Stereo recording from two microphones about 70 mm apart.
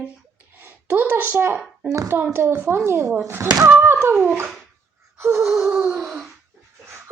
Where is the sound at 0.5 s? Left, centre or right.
Right.